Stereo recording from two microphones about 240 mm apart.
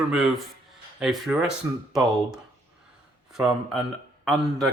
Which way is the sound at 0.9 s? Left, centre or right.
Centre.